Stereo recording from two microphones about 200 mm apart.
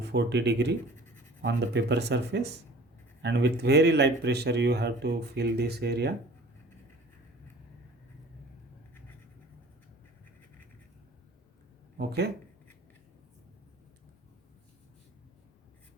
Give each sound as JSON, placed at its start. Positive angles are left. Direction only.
{"t": 0.0, "sound": "speech", "side_deg": -60}
{"t": 11.9, "sound": "speech", "side_deg": -55}